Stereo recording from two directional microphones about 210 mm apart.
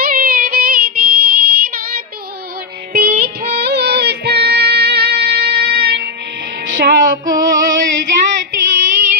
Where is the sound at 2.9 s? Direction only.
45° right (ahead or behind).